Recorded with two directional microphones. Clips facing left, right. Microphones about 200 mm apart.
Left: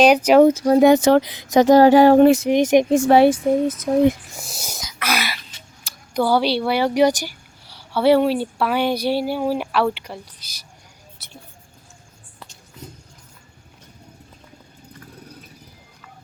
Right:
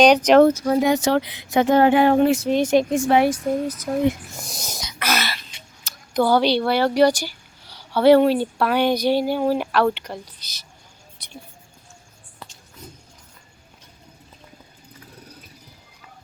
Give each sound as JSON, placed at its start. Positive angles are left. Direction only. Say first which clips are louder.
{"t": 0.0, "sound": "a woman's voice", "louder": "left 1 dB", "side_deg": 10}
{"t": 0.8, "sound": "speech", "louder": "left 9 dB", "side_deg": 60}
{"t": 1.2, "sound": "speech", "louder": "left 4 dB", "side_deg": 40}
{"t": 2.4, "sound": "speech", "louder": "left 3 dB", "side_deg": 20}
{"t": 4.4, "sound": "a sound", "louder": "right 1 dB", "side_deg": 5}
{"t": 6.1, "sound": "a woman's voice", "louder": "right 1 dB", "side_deg": 10}
{"t": 11.2, "sound": "whispering", "louder": "even", "side_deg": 5}